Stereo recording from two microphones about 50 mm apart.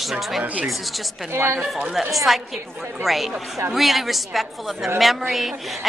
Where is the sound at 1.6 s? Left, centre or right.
Centre.